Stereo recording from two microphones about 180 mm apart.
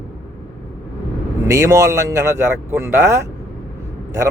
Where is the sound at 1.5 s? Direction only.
15° right (ahead or behind).